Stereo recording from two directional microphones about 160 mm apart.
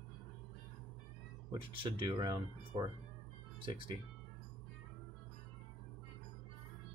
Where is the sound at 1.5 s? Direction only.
30° right (ahead or behind).